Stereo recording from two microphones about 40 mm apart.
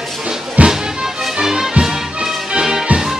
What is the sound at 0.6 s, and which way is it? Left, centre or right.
Music, right.